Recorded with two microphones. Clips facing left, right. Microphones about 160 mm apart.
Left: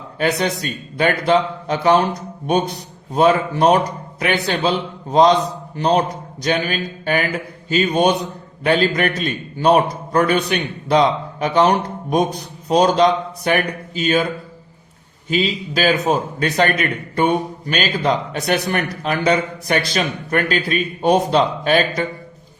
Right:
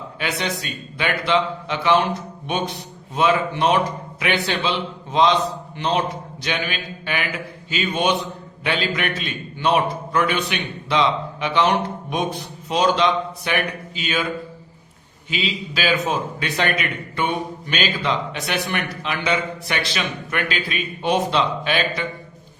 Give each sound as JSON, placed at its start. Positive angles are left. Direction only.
{"t": 0.2, "sound": "speech", "side_deg": 40}
{"t": 15.3, "sound": "a man's voice", "side_deg": 45}